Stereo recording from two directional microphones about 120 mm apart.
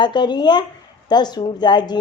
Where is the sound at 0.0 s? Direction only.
40° left (ahead or behind).